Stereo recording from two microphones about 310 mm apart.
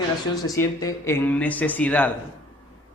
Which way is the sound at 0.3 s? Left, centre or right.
Centre.